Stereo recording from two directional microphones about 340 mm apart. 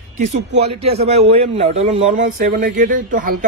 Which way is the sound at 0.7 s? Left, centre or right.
Centre.